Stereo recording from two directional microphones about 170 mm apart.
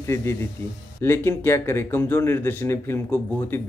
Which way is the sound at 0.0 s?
15° left (ahead or behind).